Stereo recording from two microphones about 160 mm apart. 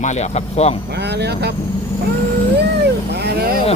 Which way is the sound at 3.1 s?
80° right.